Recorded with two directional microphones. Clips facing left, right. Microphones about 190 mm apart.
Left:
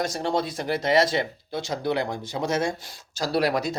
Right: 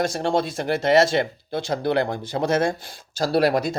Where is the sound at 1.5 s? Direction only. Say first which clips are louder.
Right 4 dB; 55° right (ahead or behind).